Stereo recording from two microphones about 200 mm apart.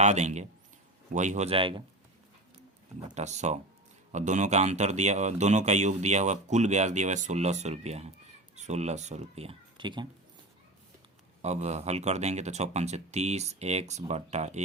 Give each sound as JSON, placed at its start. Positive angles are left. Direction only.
{"t": 0.0, "sound": "speech", "side_deg": -35}
{"t": 3.2, "sound": "speech", "side_deg": -35}
{"t": 11.4, "sound": "speech", "side_deg": -35}